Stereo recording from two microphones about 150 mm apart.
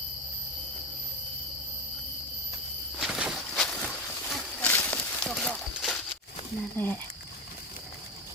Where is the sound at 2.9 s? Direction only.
Centre (ahead or behind).